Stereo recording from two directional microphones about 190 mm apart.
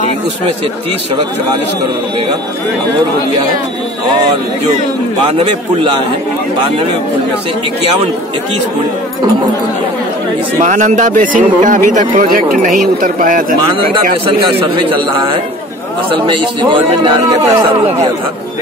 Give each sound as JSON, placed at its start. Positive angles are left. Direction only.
{"t": 10.6, "sound": "a man's voice", "side_deg": -40}
{"t": 16.1, "sound": "a man's voice", "side_deg": -25}